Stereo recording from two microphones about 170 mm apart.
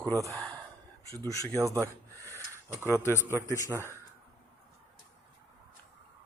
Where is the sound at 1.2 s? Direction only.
20° left (ahead or behind).